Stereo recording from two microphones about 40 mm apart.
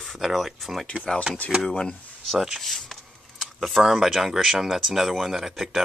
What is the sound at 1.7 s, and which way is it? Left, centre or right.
Speech, left.